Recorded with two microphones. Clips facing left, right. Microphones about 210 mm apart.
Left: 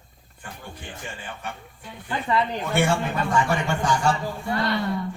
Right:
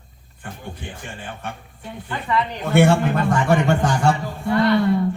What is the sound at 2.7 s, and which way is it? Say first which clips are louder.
A woman's voice: right 7 dB; 55° right (ahead or behind).